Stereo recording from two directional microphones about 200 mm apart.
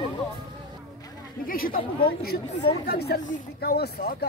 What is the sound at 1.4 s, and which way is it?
Speech, 45° left (ahead or behind).